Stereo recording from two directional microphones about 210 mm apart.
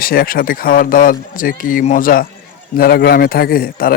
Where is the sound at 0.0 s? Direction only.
45° left (ahead or behind).